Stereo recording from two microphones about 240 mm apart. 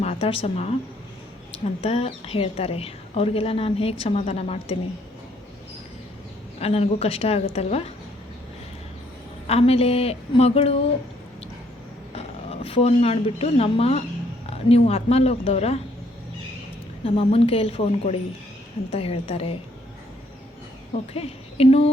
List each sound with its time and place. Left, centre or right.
0.0 s a woman's voice: left
1.8 s a woman's voice: left
6.6 s a woman's voice: left
9.5 s a woman's voice: left
12.1 s a woman's voice: left
17.0 s a woman's voice: left
21.1 s a woman's voice: left